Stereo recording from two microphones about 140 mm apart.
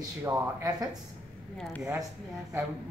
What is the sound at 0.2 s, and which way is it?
Speech, 25° right (ahead or behind).